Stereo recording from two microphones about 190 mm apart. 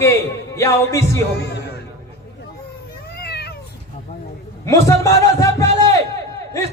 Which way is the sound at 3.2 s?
60° left (ahead or behind).